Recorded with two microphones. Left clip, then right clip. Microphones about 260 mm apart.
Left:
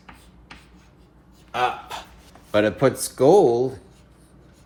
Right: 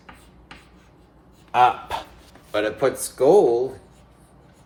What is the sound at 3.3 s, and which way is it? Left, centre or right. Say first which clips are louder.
Speech: even; left.